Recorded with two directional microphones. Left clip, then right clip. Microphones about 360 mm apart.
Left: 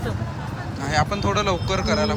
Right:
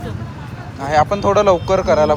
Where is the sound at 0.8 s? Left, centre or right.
Centre.